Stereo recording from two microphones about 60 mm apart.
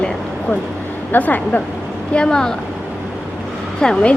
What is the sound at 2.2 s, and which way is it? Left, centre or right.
Speech, centre.